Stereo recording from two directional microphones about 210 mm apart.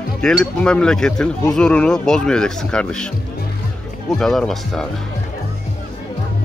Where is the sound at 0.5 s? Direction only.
5° left (ahead or behind).